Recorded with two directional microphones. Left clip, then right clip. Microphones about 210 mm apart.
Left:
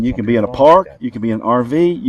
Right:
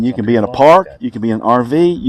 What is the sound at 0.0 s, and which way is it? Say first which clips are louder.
Speech: right 2 dB; 45° right (ahead or behind).